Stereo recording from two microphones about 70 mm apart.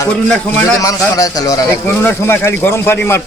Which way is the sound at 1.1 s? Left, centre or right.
Left.